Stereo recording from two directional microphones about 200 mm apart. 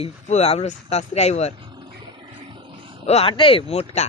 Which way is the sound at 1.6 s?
25° right (ahead or behind).